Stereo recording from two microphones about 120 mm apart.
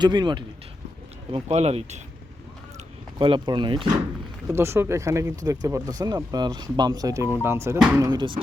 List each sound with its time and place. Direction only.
0.0 s speech: 35° right (ahead or behind)
1.3 s speech: 65° right (ahead or behind)
3.2 s speech: 40° right (ahead or behind)
4.4 s speech: 20° right (ahead or behind)
8.1 s speech: 40° right (ahead or behind)